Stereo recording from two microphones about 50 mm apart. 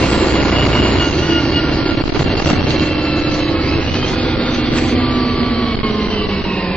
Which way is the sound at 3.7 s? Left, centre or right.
Left.